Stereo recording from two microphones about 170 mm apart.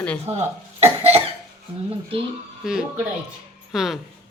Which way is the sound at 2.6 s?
5° right (ahead or behind).